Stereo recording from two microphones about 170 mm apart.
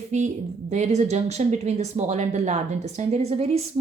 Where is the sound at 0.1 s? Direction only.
45° right (ahead or behind).